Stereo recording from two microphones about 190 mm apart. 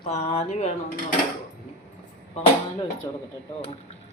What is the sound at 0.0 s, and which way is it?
Speech, 30° left (ahead or behind).